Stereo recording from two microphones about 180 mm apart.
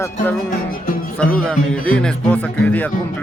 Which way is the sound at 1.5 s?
5° left (ahead or behind).